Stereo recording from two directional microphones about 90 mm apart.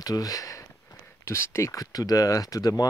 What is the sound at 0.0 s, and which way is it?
Speech, 40° left (ahead or behind).